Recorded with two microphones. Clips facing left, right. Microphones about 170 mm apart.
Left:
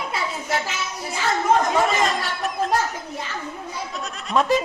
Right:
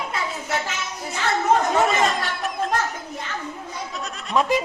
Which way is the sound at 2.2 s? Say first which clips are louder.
Left 1 dB; centre (ahead or behind).